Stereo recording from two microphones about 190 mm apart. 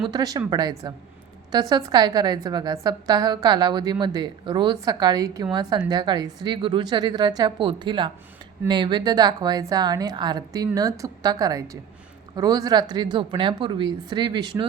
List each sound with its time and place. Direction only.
0.0 s a woman's voice: 20° right (ahead or behind)